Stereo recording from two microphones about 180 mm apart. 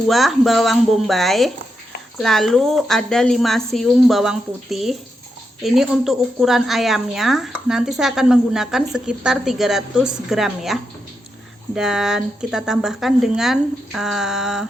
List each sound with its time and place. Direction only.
0.1 s a woman's voice: centre (ahead or behind)